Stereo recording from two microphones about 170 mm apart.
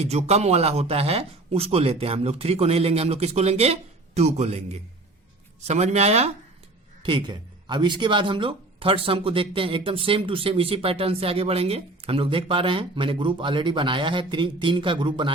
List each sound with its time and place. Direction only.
0.0 s speech: 40° right (ahead or behind)
7.0 s speech: 30° right (ahead or behind)